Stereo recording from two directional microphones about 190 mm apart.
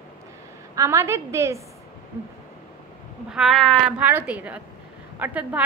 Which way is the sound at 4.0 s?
10° right (ahead or behind).